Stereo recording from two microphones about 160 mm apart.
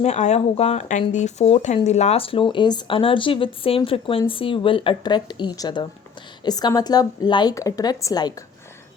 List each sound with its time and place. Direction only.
0.0 s a woman's voice: 45° left (ahead or behind); by 8.4 s 20° left (ahead or behind)